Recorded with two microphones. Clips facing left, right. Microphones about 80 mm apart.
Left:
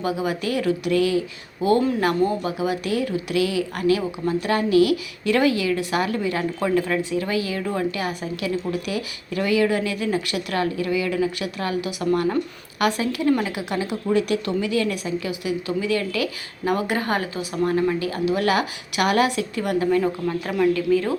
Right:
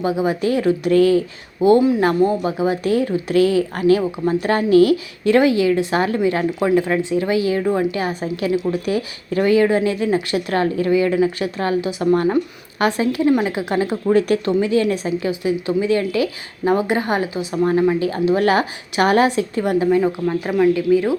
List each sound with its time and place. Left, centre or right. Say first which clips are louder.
0.0 s a woman's voice: right 5 dB; right
1.6 s a woman's voice: right 6 dB; right